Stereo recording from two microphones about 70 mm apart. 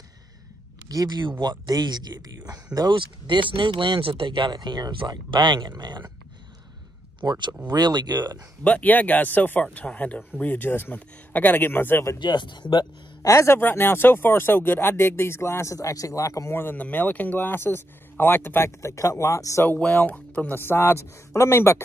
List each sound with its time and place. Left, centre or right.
0.8 s speech: right
7.2 s speech: right
8.6 s speech: left
12.2 s speech: left
13.3 s speech: left
13.6 s speech: left
16.5 s speech: left
19.8 s speech: centre
20.5 s speech: left